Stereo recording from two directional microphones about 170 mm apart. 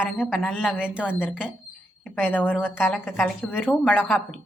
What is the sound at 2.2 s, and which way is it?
Speech, 10° left (ahead or behind).